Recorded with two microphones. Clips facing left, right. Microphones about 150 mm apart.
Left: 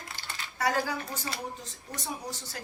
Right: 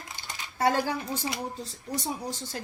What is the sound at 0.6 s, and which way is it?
Speech, 30° right (ahead or behind).